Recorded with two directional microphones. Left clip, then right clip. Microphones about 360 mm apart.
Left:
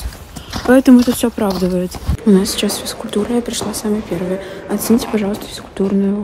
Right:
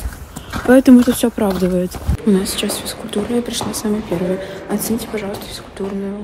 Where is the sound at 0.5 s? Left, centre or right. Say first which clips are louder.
Even; centre.